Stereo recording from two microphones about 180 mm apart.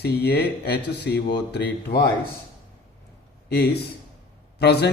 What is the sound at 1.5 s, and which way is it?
Speech, 65° left (ahead or behind).